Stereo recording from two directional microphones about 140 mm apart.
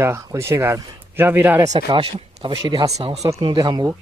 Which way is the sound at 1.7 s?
35° right (ahead or behind).